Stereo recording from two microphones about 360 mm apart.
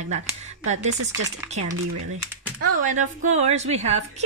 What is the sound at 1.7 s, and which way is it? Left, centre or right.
Speech, right.